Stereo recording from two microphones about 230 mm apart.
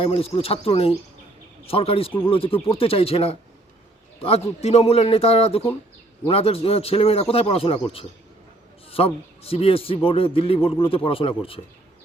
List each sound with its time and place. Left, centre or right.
0.0 s speech: left